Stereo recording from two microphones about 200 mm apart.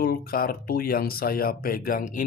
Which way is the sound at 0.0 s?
45° left (ahead or behind).